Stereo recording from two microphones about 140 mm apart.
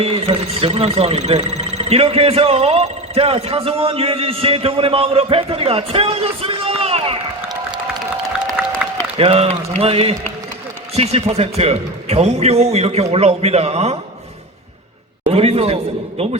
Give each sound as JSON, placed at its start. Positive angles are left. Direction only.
{"t": 0.0, "sound": "a man's voice", "side_deg": -45}
{"t": 9.1, "sound": "a man's voice", "side_deg": -45}
{"t": 15.3, "sound": "a man's voice", "side_deg": -45}